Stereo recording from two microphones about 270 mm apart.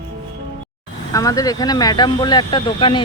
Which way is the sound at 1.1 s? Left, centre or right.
Centre.